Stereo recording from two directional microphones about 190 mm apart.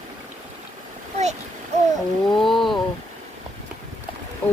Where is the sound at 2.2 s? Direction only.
Centre (ahead or behind).